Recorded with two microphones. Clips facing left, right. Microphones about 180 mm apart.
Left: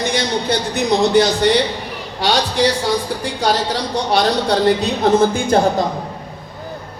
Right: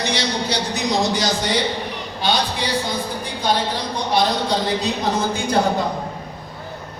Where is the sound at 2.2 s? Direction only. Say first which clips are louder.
Left 6 dB; 80° left.